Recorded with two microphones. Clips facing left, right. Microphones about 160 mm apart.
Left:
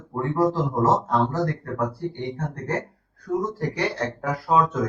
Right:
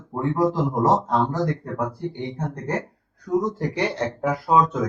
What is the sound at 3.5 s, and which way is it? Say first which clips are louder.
Speech: right 1 dB; 20° right (ahead or behind).